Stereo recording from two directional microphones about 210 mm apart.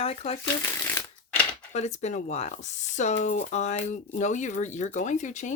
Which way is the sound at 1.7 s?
35° left (ahead or behind).